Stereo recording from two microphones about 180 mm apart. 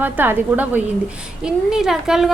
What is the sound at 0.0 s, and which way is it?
A woman's voice, 10° right (ahead or behind).